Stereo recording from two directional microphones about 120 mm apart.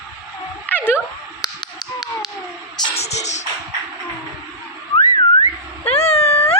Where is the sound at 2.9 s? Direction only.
65° left (ahead or behind).